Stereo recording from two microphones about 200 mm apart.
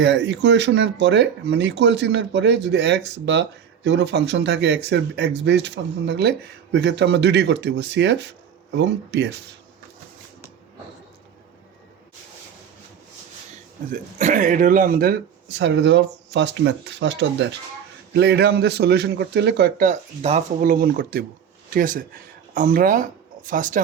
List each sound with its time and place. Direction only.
0.0 s speech: 65° right (ahead or behind)
13.9 s speech: 40° right (ahead or behind); by 19.7 s 60° right (ahead or behind)
19.8 s speech: 35° right (ahead or behind)